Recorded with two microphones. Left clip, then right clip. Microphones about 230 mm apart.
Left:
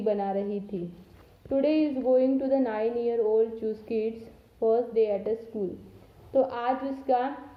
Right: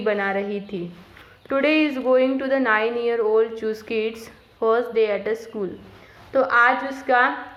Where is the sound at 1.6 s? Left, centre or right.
Centre.